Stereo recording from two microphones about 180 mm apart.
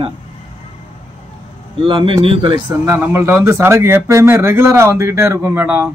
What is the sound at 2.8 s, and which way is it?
A man's voice, 15° right (ahead or behind).